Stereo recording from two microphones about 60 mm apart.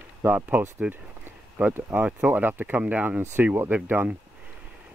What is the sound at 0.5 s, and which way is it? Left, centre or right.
Speech, right.